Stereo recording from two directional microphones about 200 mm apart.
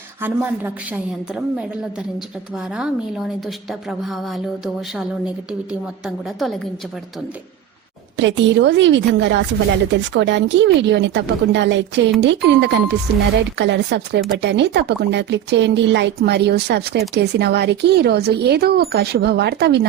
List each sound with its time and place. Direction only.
0.2 s a woman's voice: 10° right (ahead or behind)
2.7 s a woman's voice: 5° right (ahead or behind)
8.1 s speech: 65° right (ahead or behind)